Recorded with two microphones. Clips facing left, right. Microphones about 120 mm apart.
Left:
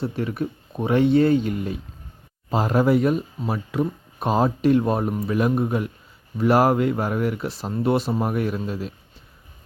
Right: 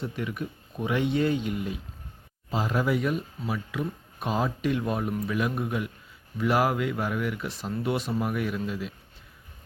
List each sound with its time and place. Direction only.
0.0 s speech: 40° left (ahead or behind)